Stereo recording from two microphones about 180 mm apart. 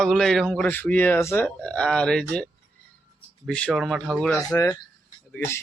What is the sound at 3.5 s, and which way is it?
Speech, 5° left (ahead or behind).